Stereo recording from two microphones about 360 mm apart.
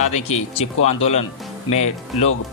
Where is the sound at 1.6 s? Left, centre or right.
Left.